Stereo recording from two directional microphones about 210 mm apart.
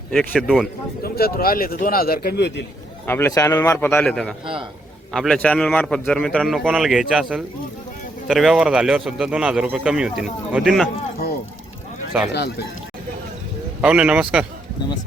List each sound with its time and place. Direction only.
0.1 s a man's voice: centre (ahead or behind)
1.0 s a man's voice: 45° left (ahead or behind)
3.1 s a man's voice: 10° left (ahead or behind)
12.3 s a man's voice: 50° left (ahead or behind)
13.8 s a man's voice: 5° right (ahead or behind)